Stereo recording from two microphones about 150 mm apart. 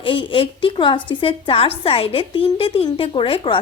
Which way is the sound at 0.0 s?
35° left (ahead or behind).